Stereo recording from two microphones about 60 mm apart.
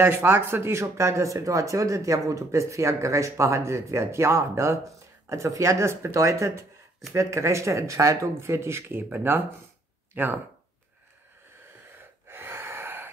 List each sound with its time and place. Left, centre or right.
0.0 s speech: right
12.0 s gasp: right